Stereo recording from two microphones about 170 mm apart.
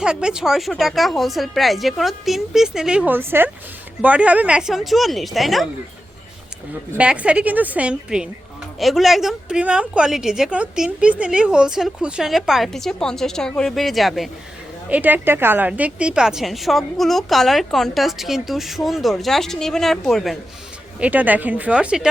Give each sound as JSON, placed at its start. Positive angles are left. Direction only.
{"t": 0.0, "sound": "a woman's voice", "side_deg": -5}
{"t": 6.9, "sound": "a woman's voice", "side_deg": -5}
{"t": 21.0, "sound": "a woman's voice", "side_deg": -10}